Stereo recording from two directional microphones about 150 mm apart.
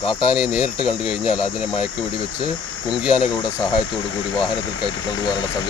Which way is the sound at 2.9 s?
5° right (ahead or behind).